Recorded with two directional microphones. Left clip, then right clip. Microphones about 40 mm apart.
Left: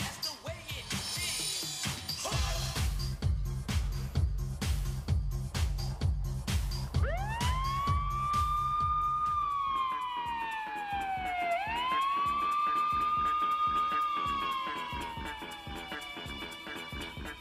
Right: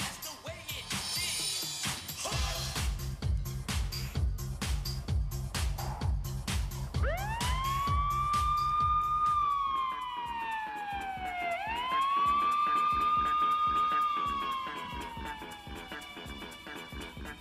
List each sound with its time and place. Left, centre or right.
0.8 s music: right
6.4 s music: right